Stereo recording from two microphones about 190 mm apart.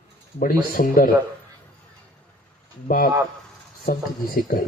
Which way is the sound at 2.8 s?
50° left (ahead or behind).